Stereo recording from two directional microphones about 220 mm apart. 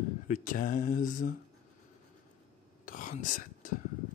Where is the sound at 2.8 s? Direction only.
40° left (ahead or behind).